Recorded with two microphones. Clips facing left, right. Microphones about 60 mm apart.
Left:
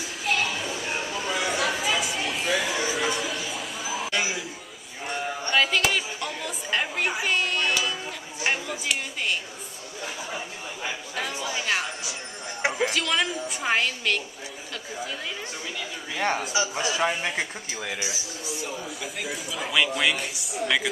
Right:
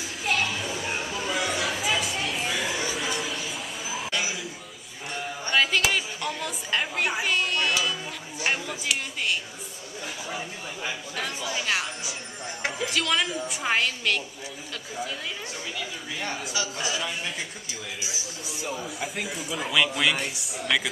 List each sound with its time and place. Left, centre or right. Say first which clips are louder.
0.0 s a sound: even; centre
5.5 s chatter: even; centre
8.5 s a sound: left 1 dB; centre
10.3 s chatter: even; centre
12.8 s speech: right 1 dB; centre
16.2 s a man's voice: left 8 dB; left
16.4 s a man's voice: left 4 dB; centre
17.4 s speech: left 5 dB; left
18.0 s speech: left 3 dB; centre